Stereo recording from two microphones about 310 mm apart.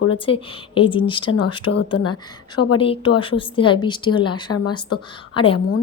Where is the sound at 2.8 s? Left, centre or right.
Centre.